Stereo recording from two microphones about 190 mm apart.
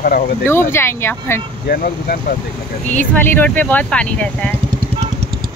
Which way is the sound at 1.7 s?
50° left (ahead or behind).